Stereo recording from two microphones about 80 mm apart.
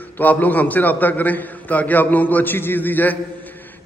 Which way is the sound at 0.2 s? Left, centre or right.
Left.